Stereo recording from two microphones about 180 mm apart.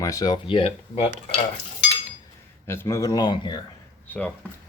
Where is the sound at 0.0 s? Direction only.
20° left (ahead or behind).